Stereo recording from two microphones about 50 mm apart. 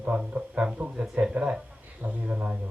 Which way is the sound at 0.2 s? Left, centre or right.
Right.